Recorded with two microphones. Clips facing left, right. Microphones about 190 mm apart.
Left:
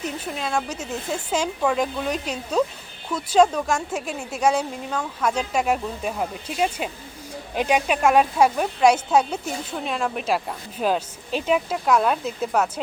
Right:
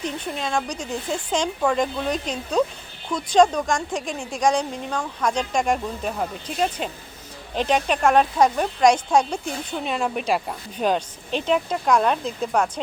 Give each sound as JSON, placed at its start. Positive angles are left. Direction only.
{"t": 0.0, "sound": "speech", "side_deg": 5}